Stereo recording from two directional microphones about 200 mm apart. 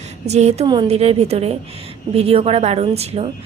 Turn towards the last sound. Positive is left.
turn(degrees=-30)  # may be behind; listen again after turning